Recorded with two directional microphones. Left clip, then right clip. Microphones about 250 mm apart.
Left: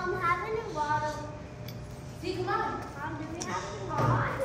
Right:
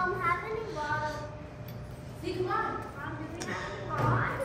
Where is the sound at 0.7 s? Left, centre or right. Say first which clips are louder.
Left 3 dB; centre.